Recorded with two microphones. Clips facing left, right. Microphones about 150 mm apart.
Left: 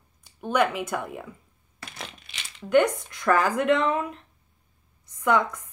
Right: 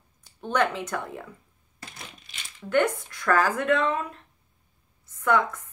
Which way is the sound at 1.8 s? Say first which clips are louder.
Left 4 dB; 75° left (ahead or behind).